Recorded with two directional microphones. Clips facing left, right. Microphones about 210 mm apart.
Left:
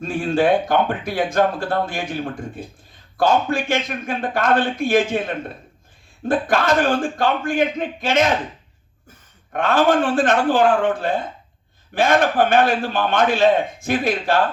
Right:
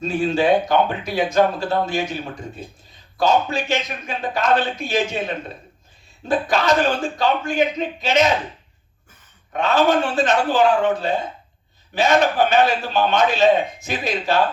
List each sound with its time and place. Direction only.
0.0 s speech: 55° left (ahead or behind)
6.2 s speech: 55° left (ahead or behind)
9.5 s speech: 55° left (ahead or behind)